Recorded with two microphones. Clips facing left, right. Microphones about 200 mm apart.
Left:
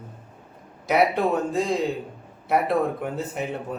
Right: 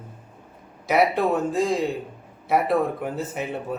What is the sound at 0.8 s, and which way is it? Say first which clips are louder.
Speech: even; centre (ahead or behind).